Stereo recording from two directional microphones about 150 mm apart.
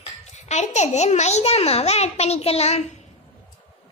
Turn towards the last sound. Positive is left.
turn(degrees=45)  # may be behind; listen again after turning